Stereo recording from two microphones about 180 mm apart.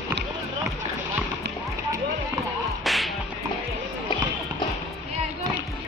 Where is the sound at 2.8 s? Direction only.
Centre (ahead or behind).